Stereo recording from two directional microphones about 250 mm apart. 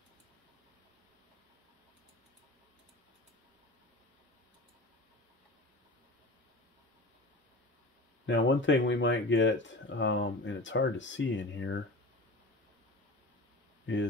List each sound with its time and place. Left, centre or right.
8.3 s speech: left